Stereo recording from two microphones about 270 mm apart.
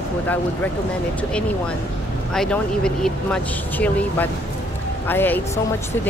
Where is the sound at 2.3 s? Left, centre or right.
Centre.